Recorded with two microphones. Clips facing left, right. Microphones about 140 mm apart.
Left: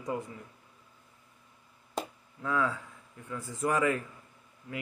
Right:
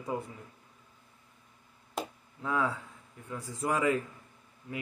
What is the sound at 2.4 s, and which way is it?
A man's voice, 15° right (ahead or behind).